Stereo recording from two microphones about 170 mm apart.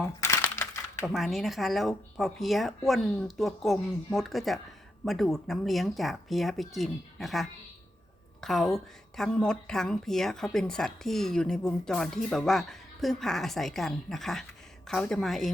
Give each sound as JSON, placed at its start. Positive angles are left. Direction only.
{"t": 0.2, "sound": "crumpling", "side_deg": 15}
{"t": 1.0, "sound": "a woman's voice", "side_deg": 0}